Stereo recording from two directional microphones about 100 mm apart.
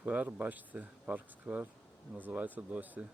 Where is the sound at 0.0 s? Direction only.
15° right (ahead or behind).